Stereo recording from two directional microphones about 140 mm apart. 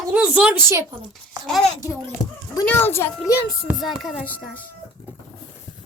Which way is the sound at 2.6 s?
15° left (ahead or behind).